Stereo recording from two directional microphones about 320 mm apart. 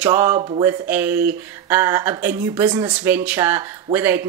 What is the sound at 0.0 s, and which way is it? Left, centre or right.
Speech, centre.